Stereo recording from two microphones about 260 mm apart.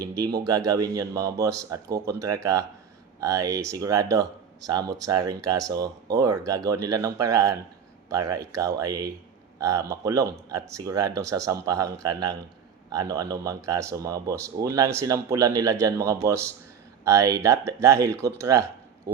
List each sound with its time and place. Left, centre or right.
0.0 s speech: centre
19.1 s oink: right